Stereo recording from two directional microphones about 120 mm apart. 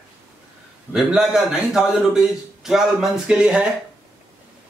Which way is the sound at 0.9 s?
5° right (ahead or behind).